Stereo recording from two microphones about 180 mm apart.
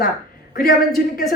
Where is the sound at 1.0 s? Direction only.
55° left (ahead or behind).